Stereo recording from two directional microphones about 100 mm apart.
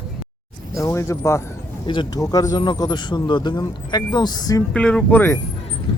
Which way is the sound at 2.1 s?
35° left (ahead or behind).